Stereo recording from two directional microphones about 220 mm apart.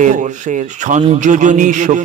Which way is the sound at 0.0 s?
35° right (ahead or behind).